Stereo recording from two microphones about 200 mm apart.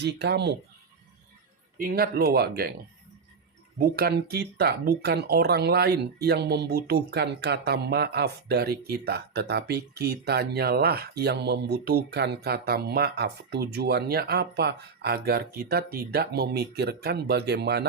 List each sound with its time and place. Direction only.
0.0 s speech: 55° right (ahead or behind)
1.8 s speech: 50° right (ahead or behind)
3.8 s speech: 50° right (ahead or behind)